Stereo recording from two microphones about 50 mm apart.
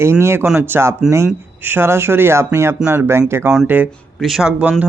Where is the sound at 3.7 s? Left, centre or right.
Right.